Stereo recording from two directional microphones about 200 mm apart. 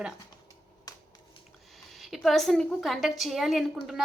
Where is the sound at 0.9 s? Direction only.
20° left (ahead or behind).